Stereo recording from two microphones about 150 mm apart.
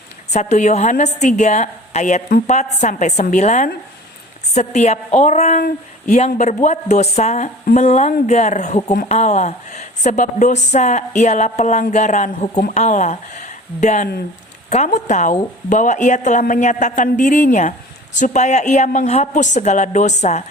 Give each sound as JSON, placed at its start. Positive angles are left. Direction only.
{"t": 0.3, "sound": "a woman's voice", "side_deg": 45}